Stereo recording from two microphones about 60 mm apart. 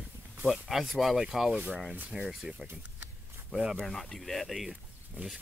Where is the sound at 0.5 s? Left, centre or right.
Centre.